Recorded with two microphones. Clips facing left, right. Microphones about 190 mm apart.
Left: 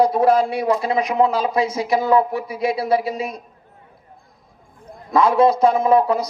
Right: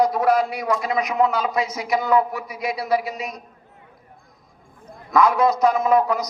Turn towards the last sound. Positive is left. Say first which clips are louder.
# left 3 dB
turn(degrees=30)  # may be behind; listen again after turning